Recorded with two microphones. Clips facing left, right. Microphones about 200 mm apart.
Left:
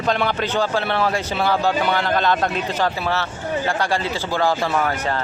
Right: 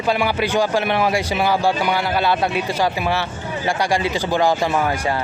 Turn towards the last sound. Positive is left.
turn(degrees=-15)  # may be behind; listen again after turning